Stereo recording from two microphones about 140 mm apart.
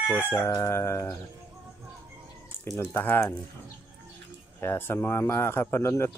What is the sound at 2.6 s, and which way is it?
Speech, 20° left (ahead or behind).